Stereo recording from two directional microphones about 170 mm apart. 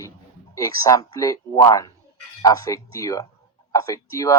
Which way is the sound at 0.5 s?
20° left (ahead or behind).